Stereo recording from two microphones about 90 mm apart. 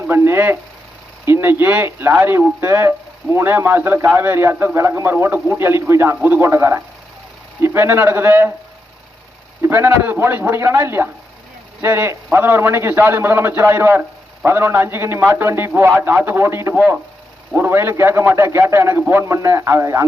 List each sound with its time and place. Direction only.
0.1 s a man's voice: 25° right (ahead or behind)
9.6 s a man's voice: 25° right (ahead or behind)